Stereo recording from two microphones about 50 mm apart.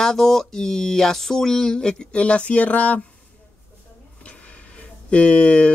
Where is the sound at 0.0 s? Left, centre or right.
Centre; by 3.1 s left.